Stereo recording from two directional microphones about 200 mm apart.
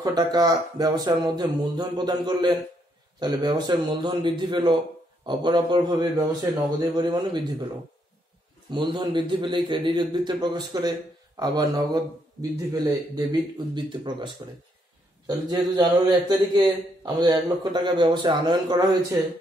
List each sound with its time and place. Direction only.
0.0 s a man's voice: 20° right (ahead or behind)
8.6 s a man's voice: 20° right (ahead or behind)
14.4 s a man's voice: 25° right (ahead or behind)
15.7 s a man's voice: 20° right (ahead or behind)